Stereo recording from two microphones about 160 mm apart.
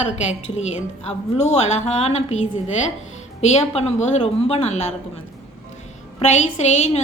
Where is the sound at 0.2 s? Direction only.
45° left (ahead or behind).